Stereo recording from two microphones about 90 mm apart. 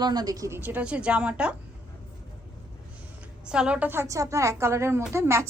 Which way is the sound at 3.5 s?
10° right (ahead or behind).